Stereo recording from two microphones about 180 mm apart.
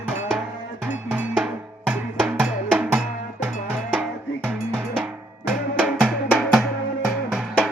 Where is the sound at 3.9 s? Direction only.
10° right (ahead or behind).